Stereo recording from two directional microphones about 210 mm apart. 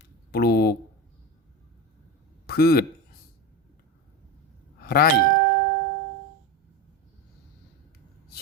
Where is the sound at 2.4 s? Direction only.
45° left (ahead or behind).